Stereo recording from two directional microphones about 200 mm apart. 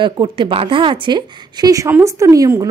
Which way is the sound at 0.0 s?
25° right (ahead or behind).